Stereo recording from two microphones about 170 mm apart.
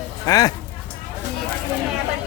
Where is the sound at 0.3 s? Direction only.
20° left (ahead or behind).